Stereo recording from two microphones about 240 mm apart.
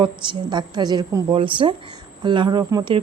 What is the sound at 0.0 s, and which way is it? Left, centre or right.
A woman's voice, centre.